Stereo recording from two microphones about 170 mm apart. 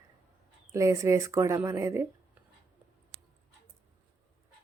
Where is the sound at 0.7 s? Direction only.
15° right (ahead or behind).